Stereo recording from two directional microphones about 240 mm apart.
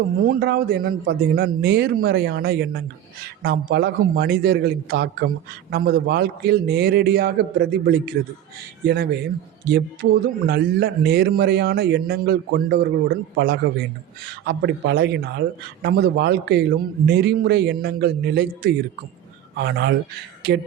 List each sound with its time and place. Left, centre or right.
0.3 s speech: right